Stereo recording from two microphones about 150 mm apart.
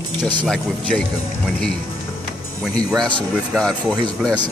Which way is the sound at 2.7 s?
5° left (ahead or behind).